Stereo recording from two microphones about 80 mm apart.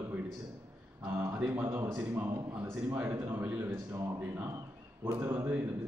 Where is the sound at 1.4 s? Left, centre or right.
Right.